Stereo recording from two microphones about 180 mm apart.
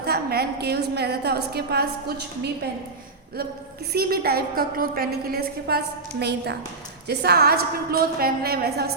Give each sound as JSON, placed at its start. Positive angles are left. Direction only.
{"t": 0.0, "sound": "a woman's voice", "side_deg": -60}
{"t": 3.9, "sound": "a woman's voice", "side_deg": -60}